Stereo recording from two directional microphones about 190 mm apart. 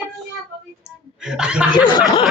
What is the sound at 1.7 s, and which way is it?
Chuckle, 25° left (ahead or behind).